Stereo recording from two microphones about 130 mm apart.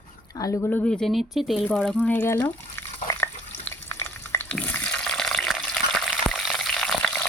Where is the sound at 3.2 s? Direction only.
20° left (ahead or behind); by 6.1 s 5° left (ahead or behind).